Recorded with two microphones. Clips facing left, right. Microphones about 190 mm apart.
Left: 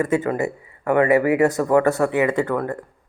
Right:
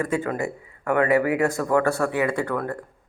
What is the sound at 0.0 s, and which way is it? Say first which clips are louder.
Speech: left 4 dB; 20° left (ahead or behind).